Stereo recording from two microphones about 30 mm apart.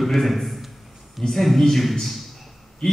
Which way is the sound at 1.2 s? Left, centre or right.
Left.